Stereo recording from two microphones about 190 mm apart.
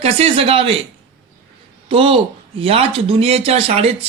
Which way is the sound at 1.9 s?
30° right (ahead or behind).